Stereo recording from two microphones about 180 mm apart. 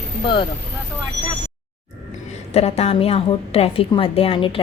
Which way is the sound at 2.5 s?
35° left (ahead or behind).